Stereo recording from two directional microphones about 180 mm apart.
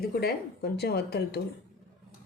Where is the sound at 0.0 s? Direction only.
60° left (ahead or behind).